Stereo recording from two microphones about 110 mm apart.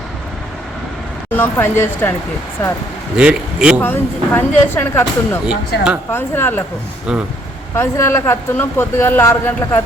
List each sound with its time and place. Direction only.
1.4 s speech: 20° left (ahead or behind)
3.2 s a man's voice: 10° right (ahead or behind)
3.8 s speech: 20° left (ahead or behind)
5.5 s a man's voice: 10° right (ahead or behind)
6.1 s speech: 20° left (ahead or behind)
7.1 s speech: 5° right (ahead or behind)
7.8 s speech: 20° left (ahead or behind)